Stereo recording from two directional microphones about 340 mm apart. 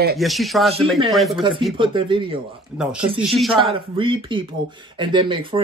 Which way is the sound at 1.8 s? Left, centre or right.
Centre.